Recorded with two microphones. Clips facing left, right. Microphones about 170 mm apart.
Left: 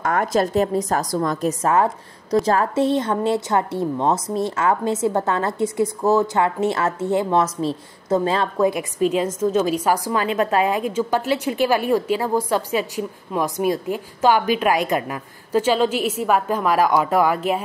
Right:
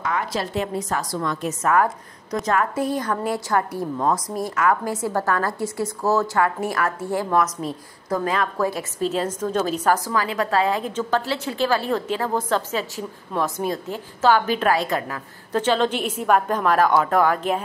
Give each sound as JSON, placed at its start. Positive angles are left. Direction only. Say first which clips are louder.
{"t": 0.0, "sound": "a woman's voice", "louder": "left 6 dB", "side_deg": 50}
{"t": 1.6, "sound": "a woman's voice", "louder": "right 1 dB", "side_deg": 25}
{"t": 8.6, "sound": "a woman's voice", "louder": "left 5 dB", "side_deg": 15}